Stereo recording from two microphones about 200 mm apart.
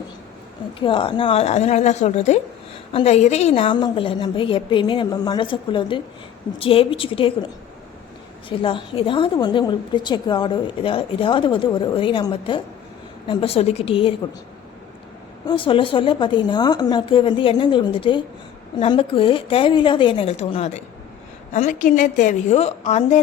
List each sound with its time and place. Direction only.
0.8 s a woman's voice: 25° left (ahead or behind)
8.4 s a woman's voice: 25° left (ahead or behind)
15.4 s a woman's voice: 25° left (ahead or behind)